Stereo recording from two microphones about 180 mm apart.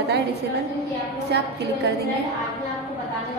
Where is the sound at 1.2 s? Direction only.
65° right (ahead or behind).